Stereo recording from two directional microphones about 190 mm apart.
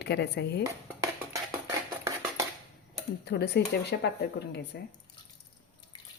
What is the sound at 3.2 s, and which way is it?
Speech, 60° left (ahead or behind).